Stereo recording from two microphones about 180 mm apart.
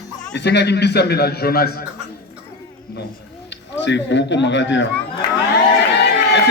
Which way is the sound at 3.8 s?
80° left.